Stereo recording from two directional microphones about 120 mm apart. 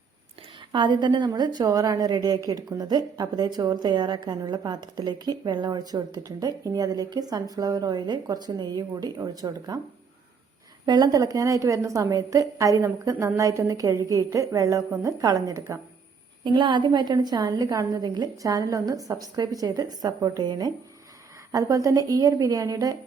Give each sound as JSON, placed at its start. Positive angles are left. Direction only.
{"t": 0.7, "sound": "a woman's voice", "side_deg": -40}
{"t": 10.8, "sound": "a woman's voice", "side_deg": -35}
{"t": 16.4, "sound": "a woman's voice", "side_deg": -40}